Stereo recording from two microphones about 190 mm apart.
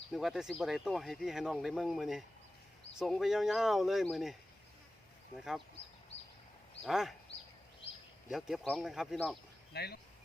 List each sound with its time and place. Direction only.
0.1 s speech: centre (ahead or behind)
5.4 s speech: centre (ahead or behind)
6.8 s speech: centre (ahead or behind)
8.3 s speech: centre (ahead or behind)
9.7 s speech: 55° left (ahead or behind)